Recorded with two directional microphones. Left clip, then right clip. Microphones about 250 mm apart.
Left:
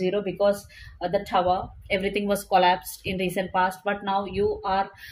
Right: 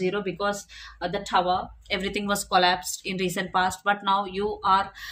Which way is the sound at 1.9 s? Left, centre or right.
Centre.